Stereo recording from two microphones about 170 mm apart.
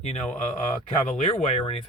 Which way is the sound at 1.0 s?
45° left (ahead or behind).